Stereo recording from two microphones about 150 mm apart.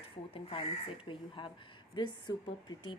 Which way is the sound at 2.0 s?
30° left (ahead or behind).